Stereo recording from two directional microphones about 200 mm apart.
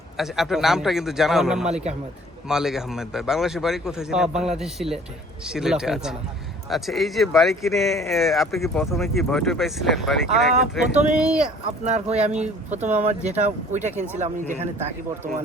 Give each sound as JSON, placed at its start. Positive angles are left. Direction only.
{"t": 0.2, "sound": "speech", "side_deg": 0}
{"t": 11.9, "sound": "speech", "side_deg": -35}